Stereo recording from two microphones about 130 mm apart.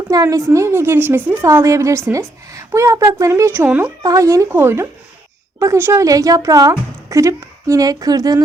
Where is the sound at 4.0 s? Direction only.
25° right (ahead or behind).